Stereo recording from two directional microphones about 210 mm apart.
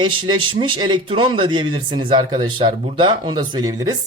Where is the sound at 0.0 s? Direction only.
25° right (ahead or behind).